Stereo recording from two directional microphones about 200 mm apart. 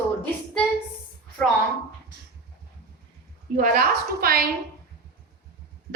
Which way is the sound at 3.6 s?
45° right (ahead or behind).